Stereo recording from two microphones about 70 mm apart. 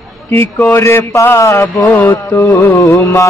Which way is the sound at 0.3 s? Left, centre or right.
Left.